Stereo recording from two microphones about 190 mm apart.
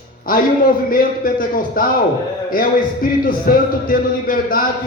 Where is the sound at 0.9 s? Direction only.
45° left (ahead or behind).